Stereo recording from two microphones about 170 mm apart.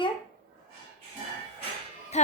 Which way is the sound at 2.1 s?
40° left (ahead or behind).